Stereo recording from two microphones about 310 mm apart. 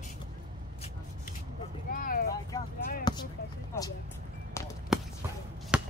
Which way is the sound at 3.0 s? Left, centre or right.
Centre.